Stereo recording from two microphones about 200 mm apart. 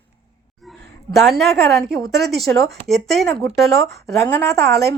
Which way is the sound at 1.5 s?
55° right (ahead or behind).